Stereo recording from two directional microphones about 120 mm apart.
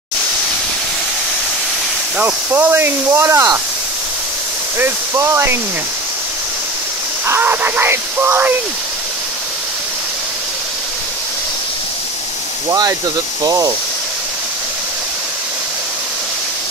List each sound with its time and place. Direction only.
2.1 s speech: 15° right (ahead or behind)
4.7 s speech: 20° right (ahead or behind)
7.2 s speech: 15° right (ahead or behind)
12.6 s speech: 30° right (ahead or behind)